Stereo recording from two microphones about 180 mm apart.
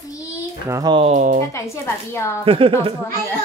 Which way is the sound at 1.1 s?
40° right (ahead or behind).